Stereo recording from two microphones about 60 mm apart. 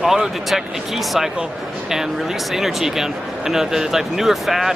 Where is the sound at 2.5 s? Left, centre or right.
Centre.